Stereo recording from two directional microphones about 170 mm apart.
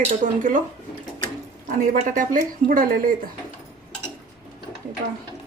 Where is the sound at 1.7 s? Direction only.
50° right (ahead or behind).